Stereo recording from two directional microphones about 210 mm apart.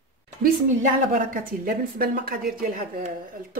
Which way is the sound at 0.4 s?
40° right (ahead or behind).